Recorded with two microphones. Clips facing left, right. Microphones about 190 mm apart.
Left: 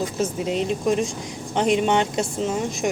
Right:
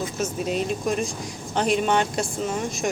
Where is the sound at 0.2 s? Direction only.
25° left (ahead or behind).